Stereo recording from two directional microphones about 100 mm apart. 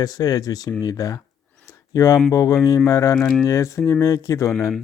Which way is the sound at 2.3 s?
30° left (ahead or behind).